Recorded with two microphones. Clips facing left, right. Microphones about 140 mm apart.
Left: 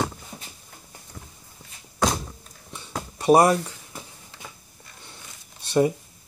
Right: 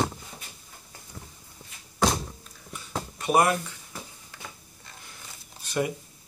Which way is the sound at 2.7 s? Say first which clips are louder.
Even; 30° left (ahead or behind).